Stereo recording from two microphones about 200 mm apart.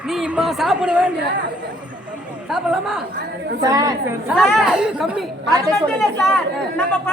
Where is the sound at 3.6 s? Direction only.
20° right (ahead or behind).